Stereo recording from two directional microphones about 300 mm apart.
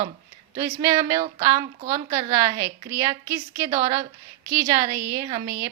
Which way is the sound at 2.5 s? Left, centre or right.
Centre.